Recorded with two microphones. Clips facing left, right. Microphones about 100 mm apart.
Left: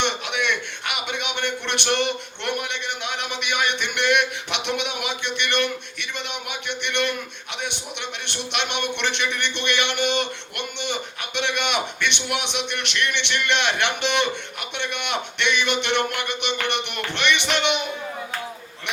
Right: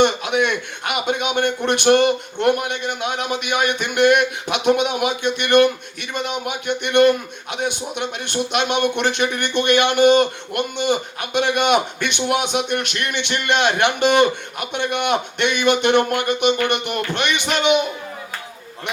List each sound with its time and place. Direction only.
0.0 s a man's voice: 45° right (ahead or behind)